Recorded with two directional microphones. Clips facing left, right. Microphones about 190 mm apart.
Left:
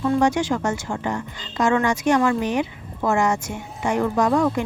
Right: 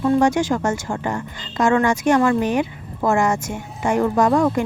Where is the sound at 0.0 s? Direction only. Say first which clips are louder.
Right 3 dB; 45° right (ahead or behind).